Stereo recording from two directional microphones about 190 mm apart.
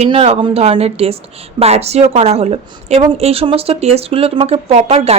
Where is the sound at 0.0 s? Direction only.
30° right (ahead or behind).